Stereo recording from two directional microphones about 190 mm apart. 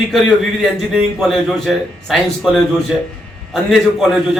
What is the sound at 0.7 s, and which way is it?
Speech, centre (ahead or behind).